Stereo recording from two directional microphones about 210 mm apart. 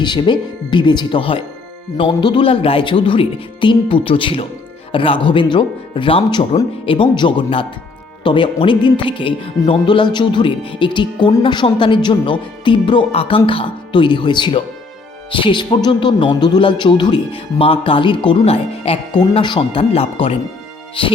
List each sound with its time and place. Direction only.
0.0 s speech: 20° left (ahead or behind)